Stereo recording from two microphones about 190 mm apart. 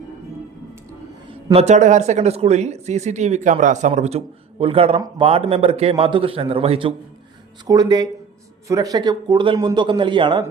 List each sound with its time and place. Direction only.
1.5 s a man's voice: 35° right (ahead or behind)